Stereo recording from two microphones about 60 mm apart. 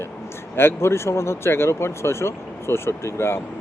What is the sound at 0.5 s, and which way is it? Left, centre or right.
Speech, left.